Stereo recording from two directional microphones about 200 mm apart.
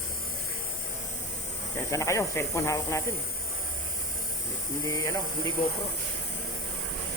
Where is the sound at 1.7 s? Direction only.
15° left (ahead or behind).